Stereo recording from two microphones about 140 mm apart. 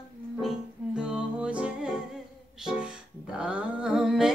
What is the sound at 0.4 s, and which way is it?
Music, 5° right (ahead or behind).